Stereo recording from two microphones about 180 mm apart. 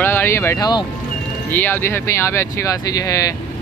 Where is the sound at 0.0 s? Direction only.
10° left (ahead or behind).